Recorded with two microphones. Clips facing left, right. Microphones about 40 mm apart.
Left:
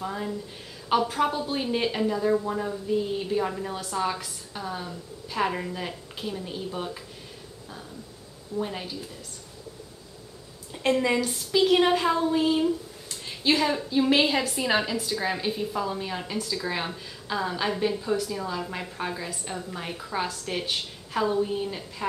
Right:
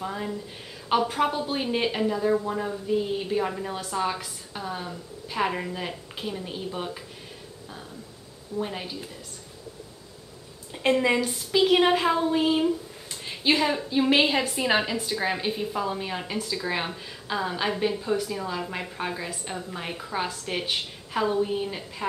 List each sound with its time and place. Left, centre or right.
0.0 s a woman's voice: centre
8.5 s a woman's voice: centre
10.7 s a woman's voice: centre